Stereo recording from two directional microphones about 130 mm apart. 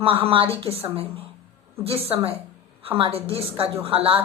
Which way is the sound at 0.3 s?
45° right (ahead or behind).